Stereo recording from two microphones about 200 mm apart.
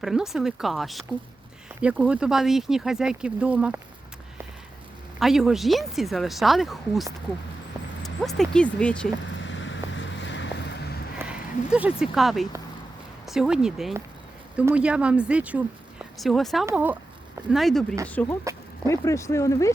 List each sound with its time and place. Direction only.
0.0 s speech: centre (ahead or behind)
5.2 s speech: centre (ahead or behind)
9.4 s vehicle: 70° left (ahead or behind)
11.2 s speech: 5° right (ahead or behind); by 19.7 s 15° left (ahead or behind)